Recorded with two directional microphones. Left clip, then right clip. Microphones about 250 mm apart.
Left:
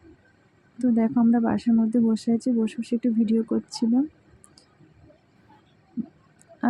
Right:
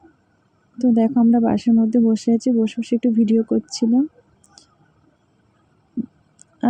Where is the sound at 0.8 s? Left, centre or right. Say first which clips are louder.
Right 5 dB; centre.